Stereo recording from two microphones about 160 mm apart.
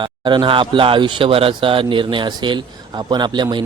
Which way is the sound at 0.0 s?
30° right (ahead or behind).